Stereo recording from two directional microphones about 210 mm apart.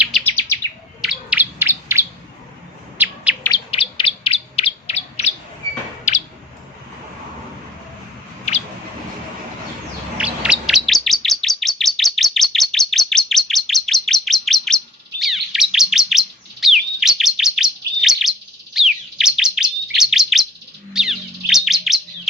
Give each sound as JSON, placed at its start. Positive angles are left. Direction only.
{"t": 0.3, "sound": "chirp", "side_deg": 10}
{"t": 1.0, "sound": "chirp", "side_deg": -5}
{"t": 3.0, "sound": "bird", "side_deg": -10}
{"t": 3.7, "sound": "chirp", "side_deg": 25}
{"t": 6.1, "sound": "bird", "side_deg": 35}
{"t": 8.5, "sound": "rodents", "side_deg": 35}
{"t": 10.2, "sound": "chirp", "side_deg": -5}
{"t": 20.9, "sound": "bird", "side_deg": 0}